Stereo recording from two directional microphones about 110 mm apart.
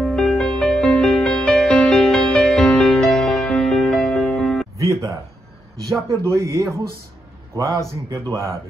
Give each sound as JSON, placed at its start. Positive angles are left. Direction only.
{"t": 0.0, "sound": "music", "side_deg": 5}
{"t": 4.7, "sound": "music", "side_deg": -30}
{"t": 6.0, "sound": "speech", "side_deg": -25}